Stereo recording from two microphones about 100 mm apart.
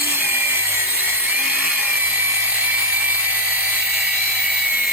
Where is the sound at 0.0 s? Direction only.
20° right (ahead or behind).